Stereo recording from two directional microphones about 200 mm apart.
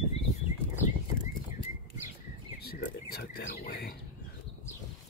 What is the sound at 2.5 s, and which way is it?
Whispering, 50° left (ahead or behind).